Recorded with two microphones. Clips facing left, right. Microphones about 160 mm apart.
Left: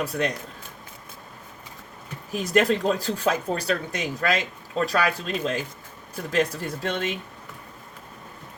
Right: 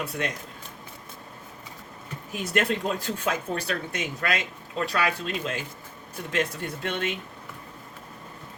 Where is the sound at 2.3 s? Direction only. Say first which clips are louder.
Left 5 dB; 35° left (ahead or behind).